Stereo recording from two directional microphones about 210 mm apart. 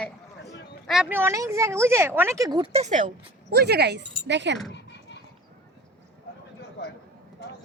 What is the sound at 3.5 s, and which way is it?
Speech, 50° right (ahead or behind).